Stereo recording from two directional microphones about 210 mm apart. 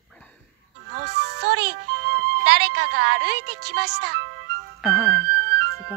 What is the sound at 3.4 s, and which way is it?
Speech, 90° right.